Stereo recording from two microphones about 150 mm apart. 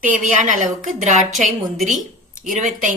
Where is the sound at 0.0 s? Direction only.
60° right (ahead or behind).